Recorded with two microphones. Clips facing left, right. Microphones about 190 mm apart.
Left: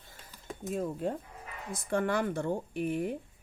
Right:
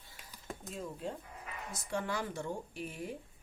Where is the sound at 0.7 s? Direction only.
55° left (ahead or behind).